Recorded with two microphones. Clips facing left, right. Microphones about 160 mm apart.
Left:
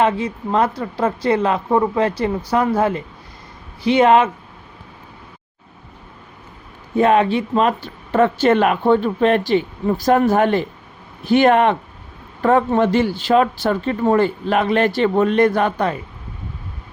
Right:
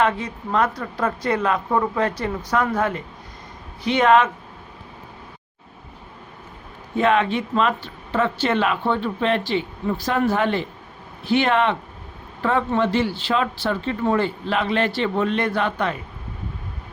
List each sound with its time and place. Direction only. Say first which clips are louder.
0.0 s a woman's voice: left 4 dB; 25° left (ahead or behind)
6.9 s speech: left 4 dB; 35° left (ahead or behind)